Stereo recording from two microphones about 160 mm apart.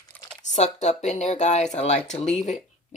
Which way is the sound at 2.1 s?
5° left (ahead or behind).